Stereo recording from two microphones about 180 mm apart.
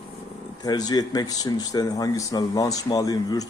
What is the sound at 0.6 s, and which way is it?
Speech, 20° left (ahead or behind).